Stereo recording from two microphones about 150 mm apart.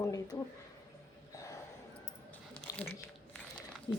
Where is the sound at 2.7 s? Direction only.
25° left (ahead or behind).